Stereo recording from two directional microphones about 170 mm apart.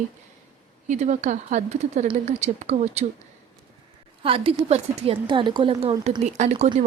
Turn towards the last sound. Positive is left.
turn(degrees=-40)  # may be behind; listen again after turning